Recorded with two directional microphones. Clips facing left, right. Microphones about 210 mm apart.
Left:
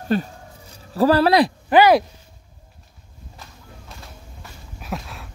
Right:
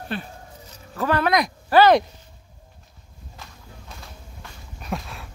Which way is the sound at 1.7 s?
15° left (ahead or behind).